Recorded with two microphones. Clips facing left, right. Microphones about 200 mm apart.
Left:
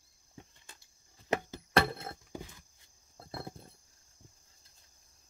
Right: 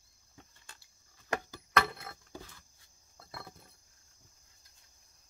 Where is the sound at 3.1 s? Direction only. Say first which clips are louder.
Left 6 dB; 30° left (ahead or behind).